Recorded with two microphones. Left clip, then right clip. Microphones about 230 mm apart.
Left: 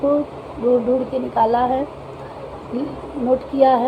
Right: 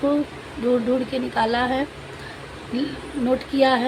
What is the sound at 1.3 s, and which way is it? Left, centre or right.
Speech, right.